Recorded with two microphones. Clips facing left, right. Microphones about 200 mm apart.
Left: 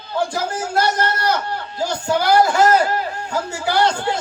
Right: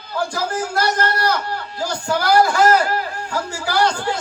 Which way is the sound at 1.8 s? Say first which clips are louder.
Left 2 dB; 20° left (ahead or behind).